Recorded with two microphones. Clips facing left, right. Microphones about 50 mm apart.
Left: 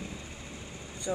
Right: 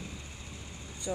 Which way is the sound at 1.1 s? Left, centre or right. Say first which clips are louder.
Left 2 dB; left.